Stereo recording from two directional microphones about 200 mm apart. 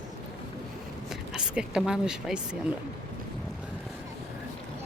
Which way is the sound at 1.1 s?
5° right (ahead or behind).